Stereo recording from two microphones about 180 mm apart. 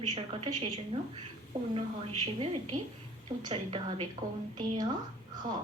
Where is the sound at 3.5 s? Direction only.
30° right (ahead or behind).